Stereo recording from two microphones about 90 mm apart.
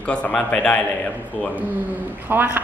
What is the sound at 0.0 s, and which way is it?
A man's voice, 15° left (ahead or behind).